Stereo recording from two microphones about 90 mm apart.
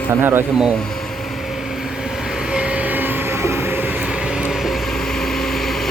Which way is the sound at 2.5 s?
10° right (ahead or behind).